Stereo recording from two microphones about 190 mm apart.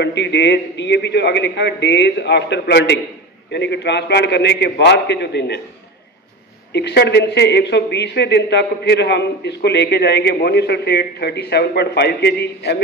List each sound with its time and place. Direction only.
0.0 s a man's voice: 65° left (ahead or behind)
6.7 s a man's voice: 60° left (ahead or behind)